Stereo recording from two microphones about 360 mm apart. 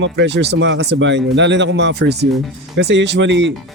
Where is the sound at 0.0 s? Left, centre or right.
Right.